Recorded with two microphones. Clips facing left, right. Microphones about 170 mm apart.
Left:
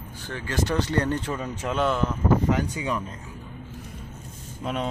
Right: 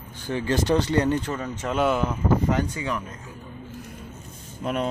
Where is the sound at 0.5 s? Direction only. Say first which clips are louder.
Right 3 dB; 20° right (ahead or behind).